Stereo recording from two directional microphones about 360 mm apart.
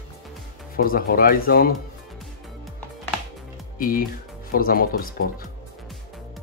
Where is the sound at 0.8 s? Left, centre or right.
Left.